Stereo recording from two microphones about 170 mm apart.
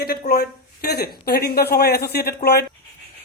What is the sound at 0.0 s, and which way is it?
Speech, 60° left (ahead or behind).